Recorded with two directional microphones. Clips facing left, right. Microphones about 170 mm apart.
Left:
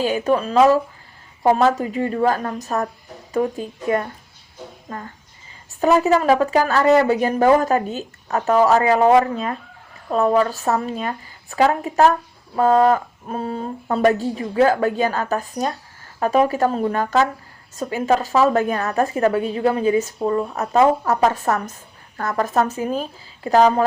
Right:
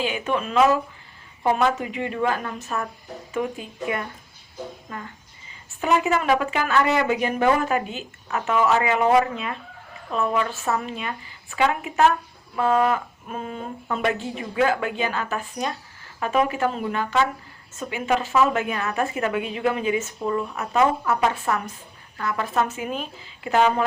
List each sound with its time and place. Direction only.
0.0 s a woman's voice: 40° left (ahead or behind)
5.8 s a woman's voice: 35° left (ahead or behind)